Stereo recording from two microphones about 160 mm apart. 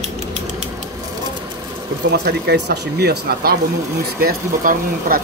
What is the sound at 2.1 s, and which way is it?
Speech, 90° right.